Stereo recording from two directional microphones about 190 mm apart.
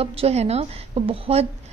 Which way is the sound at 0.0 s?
30° right (ahead or behind).